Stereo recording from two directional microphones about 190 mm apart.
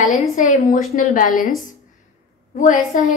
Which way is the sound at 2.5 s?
40° left (ahead or behind).